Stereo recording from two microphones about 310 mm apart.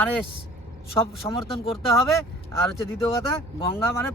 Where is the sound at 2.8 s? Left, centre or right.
Centre.